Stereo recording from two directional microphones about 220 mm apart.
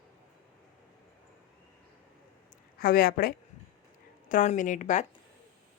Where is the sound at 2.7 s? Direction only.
40° left (ahead or behind).